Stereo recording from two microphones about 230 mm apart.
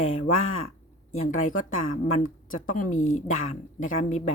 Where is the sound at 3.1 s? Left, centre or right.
Left.